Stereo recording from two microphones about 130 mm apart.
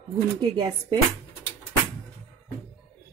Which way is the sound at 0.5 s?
35° right (ahead or behind).